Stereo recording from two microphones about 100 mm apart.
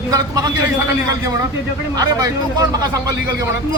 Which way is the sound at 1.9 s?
40° right (ahead or behind).